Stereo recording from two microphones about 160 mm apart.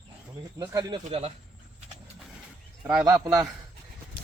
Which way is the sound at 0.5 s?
25° right (ahead or behind).